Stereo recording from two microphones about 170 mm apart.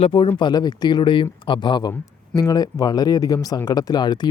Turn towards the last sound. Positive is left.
turn(degrees=25)  # may be behind; listen again after turning